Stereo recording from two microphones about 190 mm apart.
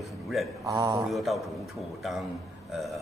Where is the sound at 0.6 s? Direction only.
15° right (ahead or behind).